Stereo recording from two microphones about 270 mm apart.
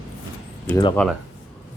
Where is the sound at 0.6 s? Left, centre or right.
Centre.